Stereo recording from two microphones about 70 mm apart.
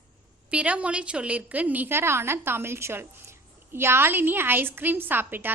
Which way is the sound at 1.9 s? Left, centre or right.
Right.